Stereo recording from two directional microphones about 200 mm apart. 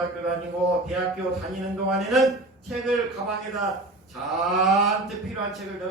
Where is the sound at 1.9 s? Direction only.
Centre (ahead or behind).